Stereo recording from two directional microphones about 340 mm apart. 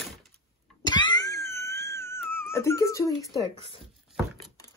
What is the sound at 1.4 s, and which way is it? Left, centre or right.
Wail, centre.